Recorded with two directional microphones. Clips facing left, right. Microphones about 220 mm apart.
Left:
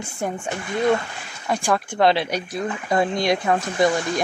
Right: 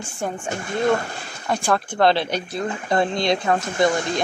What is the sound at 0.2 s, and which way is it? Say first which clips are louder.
Speech: left 1 dB; 15° left (ahead or behind).